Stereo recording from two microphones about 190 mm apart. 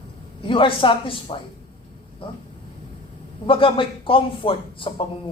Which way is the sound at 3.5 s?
30° left (ahead or behind).